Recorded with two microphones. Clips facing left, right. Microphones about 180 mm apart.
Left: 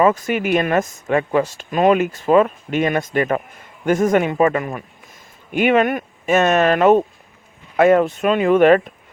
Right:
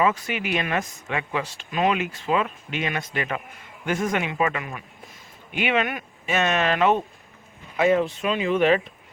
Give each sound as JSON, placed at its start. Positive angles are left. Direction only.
{"t": 0.0, "sound": "speech", "side_deg": 45}